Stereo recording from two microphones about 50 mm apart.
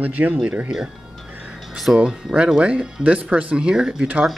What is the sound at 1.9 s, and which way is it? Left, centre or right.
Speech, centre.